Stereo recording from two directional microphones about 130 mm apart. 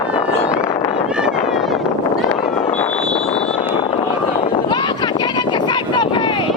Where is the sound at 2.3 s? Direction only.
55° left (ahead or behind).